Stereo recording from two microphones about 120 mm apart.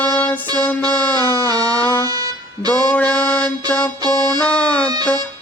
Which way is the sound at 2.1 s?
30° right (ahead or behind).